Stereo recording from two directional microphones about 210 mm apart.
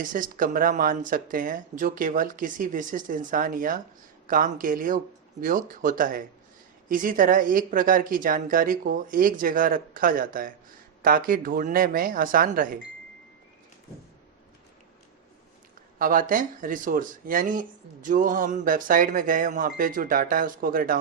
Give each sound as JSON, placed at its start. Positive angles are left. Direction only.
{"t": 0.0, "sound": "speech", "side_deg": -40}
{"t": 16.0, "sound": "speech", "side_deg": -40}